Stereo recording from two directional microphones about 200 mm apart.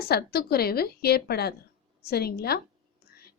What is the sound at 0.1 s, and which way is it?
A woman's voice, 50° left (ahead or behind).